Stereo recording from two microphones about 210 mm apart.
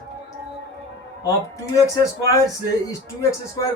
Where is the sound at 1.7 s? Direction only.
15° left (ahead or behind).